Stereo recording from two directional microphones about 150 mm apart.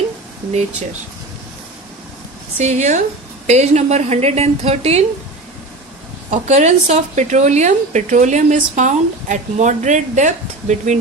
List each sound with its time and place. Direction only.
2.6 s a woman's voice: 50° right (ahead or behind)
6.3 s a woman's voice: 50° right (ahead or behind)